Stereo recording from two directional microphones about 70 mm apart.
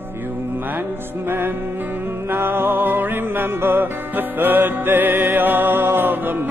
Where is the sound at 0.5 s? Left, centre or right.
Right.